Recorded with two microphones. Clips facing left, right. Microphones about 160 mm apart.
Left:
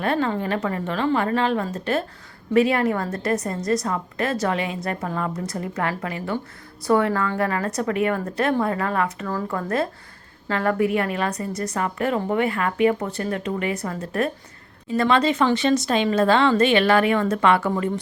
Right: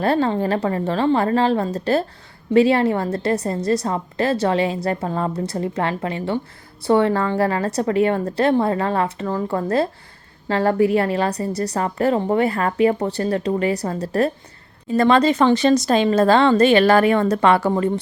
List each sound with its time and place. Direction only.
0.0 s a woman's voice: 35° right (ahead or behind)